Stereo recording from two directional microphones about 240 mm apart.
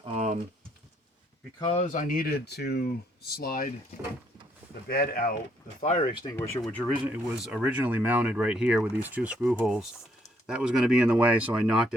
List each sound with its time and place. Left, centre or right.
0.0 s typing: right
1.5 s speech: left
4.9 s speech: left
5.8 s speech: left
6.3 s speech: centre